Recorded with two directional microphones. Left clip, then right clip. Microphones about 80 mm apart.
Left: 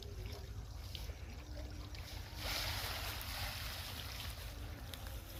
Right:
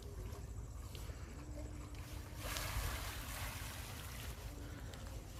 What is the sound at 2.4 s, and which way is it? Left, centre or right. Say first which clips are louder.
Boat: left 4 dB; centre.